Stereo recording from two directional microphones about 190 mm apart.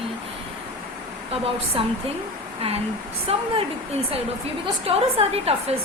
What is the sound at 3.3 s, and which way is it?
Speech, 30° right (ahead or behind).